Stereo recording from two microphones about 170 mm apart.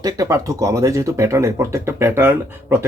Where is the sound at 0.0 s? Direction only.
20° right (ahead or behind).